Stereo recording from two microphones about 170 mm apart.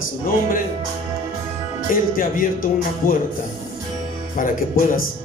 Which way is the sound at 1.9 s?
55° left (ahead or behind).